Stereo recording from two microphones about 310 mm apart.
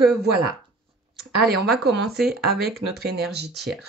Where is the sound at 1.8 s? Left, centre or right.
Right.